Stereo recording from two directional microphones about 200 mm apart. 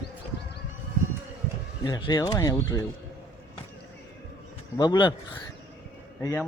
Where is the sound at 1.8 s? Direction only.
20° left (ahead or behind).